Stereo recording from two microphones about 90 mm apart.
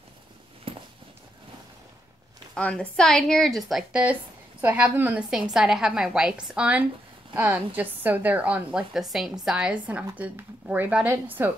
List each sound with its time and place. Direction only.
0.7 s a sound: 90° right
2.5 s speech: 15° left (ahead or behind)
4.0 s a woman's voice: 15° right (ahead or behind)
5.3 s a woman's voice: 5° right (ahead or behind)
8.9 s a woman's voice: centre (ahead or behind); by 11.5 s 20° right (ahead or behind)